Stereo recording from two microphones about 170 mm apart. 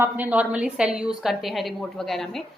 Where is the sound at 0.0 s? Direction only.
10° right (ahead or behind).